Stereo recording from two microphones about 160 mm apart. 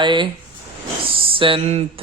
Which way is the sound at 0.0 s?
30° right (ahead or behind).